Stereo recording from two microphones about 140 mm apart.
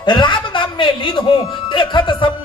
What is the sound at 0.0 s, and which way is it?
A man's voice, 35° left (ahead or behind).